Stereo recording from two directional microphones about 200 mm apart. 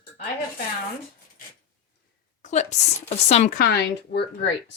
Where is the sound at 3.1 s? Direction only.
30° left (ahead or behind); by 4.2 s 55° left (ahead or behind).